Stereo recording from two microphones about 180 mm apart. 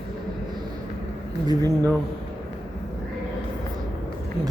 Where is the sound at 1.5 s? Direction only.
20° right (ahead or behind).